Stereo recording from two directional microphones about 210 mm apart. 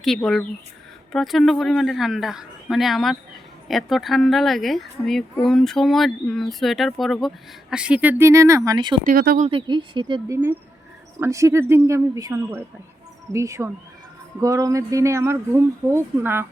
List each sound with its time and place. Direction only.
0.0 s speech: centre (ahead or behind); by 9.0 s 20° right (ahead or behind)
9.0 s speech: 45° right (ahead or behind)
9.5 s speech: 25° right (ahead or behind)